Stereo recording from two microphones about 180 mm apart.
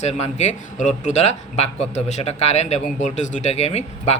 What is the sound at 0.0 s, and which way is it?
Speech, 35° left (ahead or behind).